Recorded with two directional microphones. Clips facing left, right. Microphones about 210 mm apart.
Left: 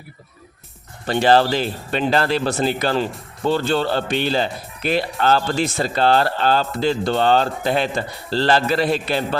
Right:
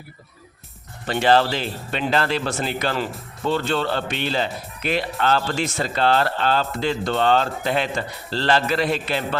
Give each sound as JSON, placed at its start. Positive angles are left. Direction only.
{"t": 1.2, "sound": "speech", "side_deg": 40}